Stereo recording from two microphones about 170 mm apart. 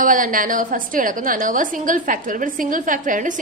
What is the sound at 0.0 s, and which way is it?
A woman's voice, 50° right (ahead or behind).